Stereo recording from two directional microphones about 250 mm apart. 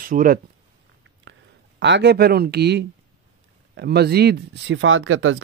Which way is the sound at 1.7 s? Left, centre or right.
Right.